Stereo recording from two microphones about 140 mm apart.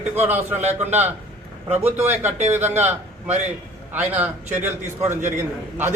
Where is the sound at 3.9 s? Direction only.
10° right (ahead or behind).